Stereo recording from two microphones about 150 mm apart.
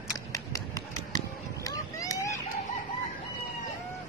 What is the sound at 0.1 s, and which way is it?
Run, 20° left (ahead or behind).